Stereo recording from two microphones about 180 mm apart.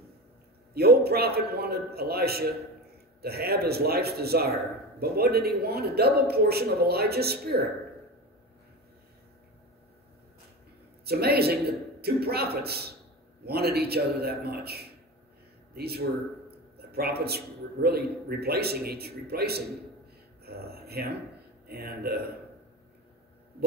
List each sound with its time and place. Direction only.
0.7 s a man's voice: 60° right (ahead or behind)
11.1 s a man's voice: 60° right (ahead or behind)
20.4 s a sound: 60° right (ahead or behind)
21.6 s a man's voice: 60° right (ahead or behind)